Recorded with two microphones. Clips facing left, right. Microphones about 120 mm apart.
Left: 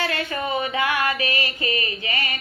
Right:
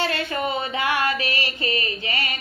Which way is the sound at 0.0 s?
30° right (ahead or behind).